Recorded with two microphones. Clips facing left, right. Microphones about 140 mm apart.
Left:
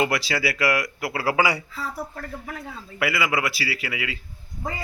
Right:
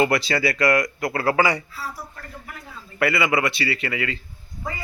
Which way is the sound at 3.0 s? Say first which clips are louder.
Right 3 dB; centre (ahead or behind).